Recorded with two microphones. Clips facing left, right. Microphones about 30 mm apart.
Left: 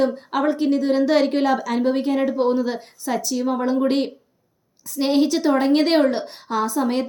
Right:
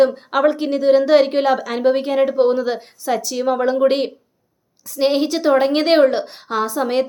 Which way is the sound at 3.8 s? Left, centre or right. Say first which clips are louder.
Right 4 dB; right.